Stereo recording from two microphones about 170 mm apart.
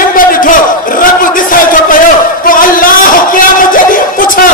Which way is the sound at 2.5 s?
55° left (ahead or behind).